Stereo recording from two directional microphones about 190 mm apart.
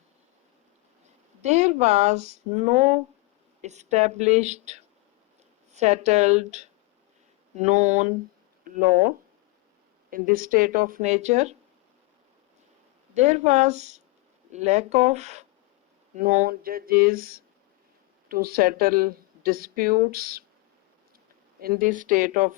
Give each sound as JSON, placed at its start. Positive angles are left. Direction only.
{"t": 1.4, "sound": "speech", "side_deg": -35}
{"t": 13.1, "sound": "speech", "side_deg": -35}
{"t": 21.6, "sound": "speech", "side_deg": -50}